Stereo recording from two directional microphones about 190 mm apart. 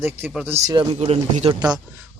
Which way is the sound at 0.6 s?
25° right (ahead or behind).